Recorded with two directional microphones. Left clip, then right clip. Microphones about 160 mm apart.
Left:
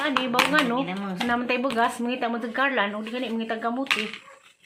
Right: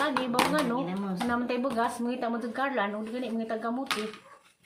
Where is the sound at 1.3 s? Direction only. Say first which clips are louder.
Left 5 dB; 30° left (ahead or behind).